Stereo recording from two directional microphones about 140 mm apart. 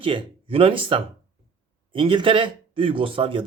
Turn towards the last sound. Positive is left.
turn(degrees=-40)  # may be behind; listen again after turning